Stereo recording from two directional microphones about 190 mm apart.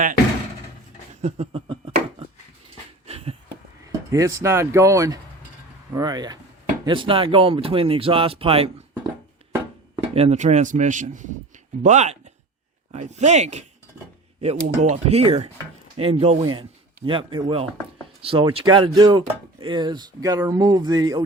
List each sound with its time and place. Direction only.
1.2 s a sound: 35° right (ahead or behind)
3.8 s speech: 15° right (ahead or behind)
10.2 s speech: 35° right (ahead or behind); by 21.2 s 20° right (ahead or behind)